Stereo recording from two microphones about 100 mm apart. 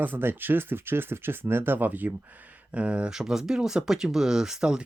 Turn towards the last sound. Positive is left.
turn(degrees=-5)  # may be behind; listen again after turning